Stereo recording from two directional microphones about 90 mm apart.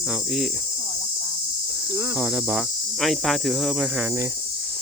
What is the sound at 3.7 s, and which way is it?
Cricket, 10° right (ahead or behind).